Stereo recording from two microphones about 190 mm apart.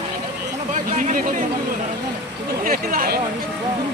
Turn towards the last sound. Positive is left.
turn(degrees=-50)  # may be behind; listen again after turning